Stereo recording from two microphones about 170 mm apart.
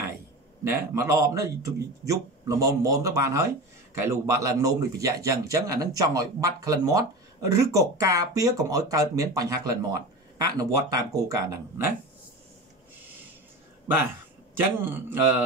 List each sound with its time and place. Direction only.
0.7 s a man's voice: 15° right (ahead or behind)
14.6 s mantra: 10° right (ahead or behind)